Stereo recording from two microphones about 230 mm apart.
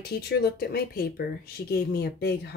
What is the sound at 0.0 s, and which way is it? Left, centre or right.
Speech, left.